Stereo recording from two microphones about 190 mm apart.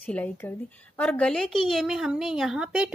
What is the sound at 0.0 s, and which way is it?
A woman's voice, 10° left (ahead or behind).